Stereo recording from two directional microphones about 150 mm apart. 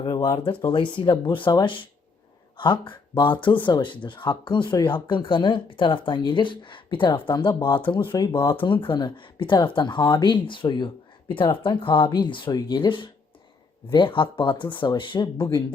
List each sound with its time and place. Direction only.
0.0 s speech: 30° left (ahead or behind)